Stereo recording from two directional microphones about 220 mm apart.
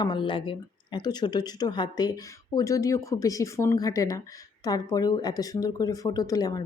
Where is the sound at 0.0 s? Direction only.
20° left (ahead or behind).